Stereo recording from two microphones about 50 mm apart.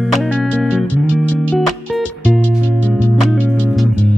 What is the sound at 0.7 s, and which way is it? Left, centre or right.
Music, left.